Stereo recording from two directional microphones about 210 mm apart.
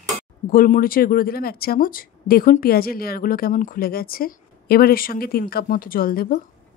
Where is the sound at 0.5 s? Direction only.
40° left (ahead or behind).